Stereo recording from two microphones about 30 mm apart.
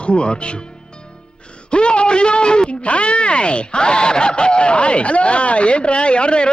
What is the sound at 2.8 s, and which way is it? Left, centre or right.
Speech, left.